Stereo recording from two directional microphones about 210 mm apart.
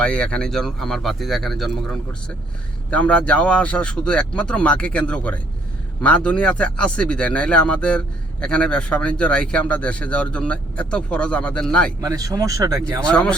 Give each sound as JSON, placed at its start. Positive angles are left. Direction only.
{"t": 0.0, "sound": "speech", "side_deg": 5}
{"t": 12.0, "sound": "speech", "side_deg": -15}
{"t": 13.1, "sound": "speech", "side_deg": 5}